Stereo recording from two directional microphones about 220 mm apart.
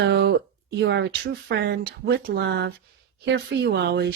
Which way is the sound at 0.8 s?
50° right (ahead or behind).